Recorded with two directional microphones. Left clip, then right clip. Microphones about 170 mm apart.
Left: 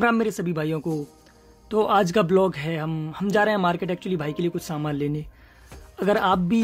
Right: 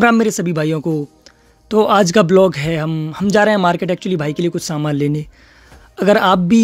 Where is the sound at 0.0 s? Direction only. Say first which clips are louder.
Right 9 dB; 40° right (ahead or behind).